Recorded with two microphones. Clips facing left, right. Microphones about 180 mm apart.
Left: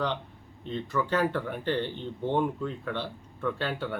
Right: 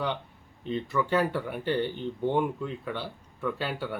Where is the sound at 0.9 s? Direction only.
5° right (ahead or behind).